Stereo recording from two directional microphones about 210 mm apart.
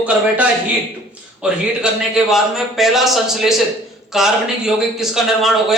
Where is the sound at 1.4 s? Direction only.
5° right (ahead or behind).